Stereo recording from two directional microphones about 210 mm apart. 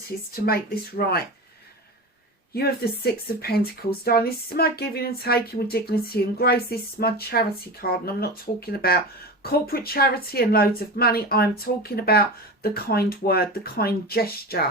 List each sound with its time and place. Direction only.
0.3 s speech: 45° left (ahead or behind)
2.5 s speech: 45° left (ahead or behind)